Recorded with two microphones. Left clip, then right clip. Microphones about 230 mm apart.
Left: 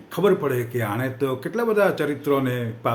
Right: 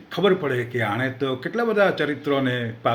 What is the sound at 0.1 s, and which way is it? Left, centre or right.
Speech, centre.